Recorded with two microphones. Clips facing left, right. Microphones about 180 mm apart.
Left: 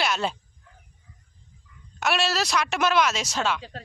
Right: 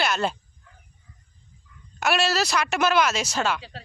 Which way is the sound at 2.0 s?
5° right (ahead or behind).